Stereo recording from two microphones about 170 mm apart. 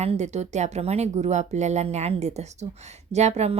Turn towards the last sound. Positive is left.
turn(degrees=-40)  # may be behind; listen again after turning